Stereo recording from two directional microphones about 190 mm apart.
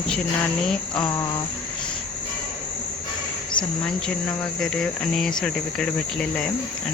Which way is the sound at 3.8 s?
5° left (ahead or behind).